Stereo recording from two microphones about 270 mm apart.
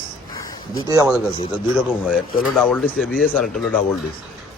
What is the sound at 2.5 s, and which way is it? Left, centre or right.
Speech, centre.